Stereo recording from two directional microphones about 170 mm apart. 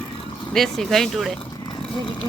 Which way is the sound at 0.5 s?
Centre (ahead or behind).